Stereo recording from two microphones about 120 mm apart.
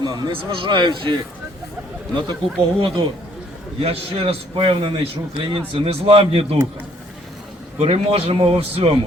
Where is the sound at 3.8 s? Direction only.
50° right (ahead or behind).